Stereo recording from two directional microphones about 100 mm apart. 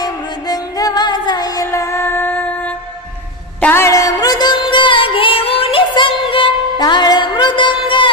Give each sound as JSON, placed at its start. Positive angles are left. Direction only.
{"t": 0.0, "sound": "music", "side_deg": 40}
{"t": 1.7, "sound": "music", "side_deg": 30}
{"t": 3.9, "sound": "music", "side_deg": 35}
{"t": 6.8, "sound": "music", "side_deg": 45}